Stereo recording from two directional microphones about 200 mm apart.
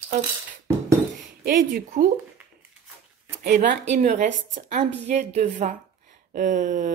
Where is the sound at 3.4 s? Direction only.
45° right (ahead or behind).